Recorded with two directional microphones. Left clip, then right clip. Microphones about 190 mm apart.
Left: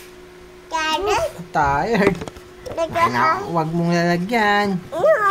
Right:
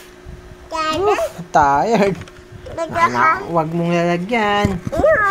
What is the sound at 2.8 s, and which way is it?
Speech, 5° right (ahead or behind).